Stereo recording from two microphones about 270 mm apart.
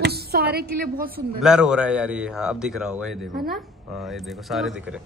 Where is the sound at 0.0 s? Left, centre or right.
Right.